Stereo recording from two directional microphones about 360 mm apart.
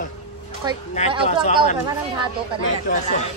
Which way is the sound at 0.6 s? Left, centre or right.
Centre.